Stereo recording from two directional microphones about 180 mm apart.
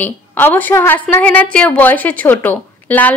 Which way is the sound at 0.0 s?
10° left (ahead or behind).